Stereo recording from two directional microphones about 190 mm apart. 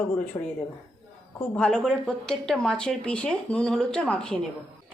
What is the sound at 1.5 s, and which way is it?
Speech, 5° left (ahead or behind).